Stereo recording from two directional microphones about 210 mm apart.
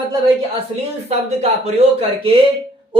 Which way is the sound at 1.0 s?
30° right (ahead or behind).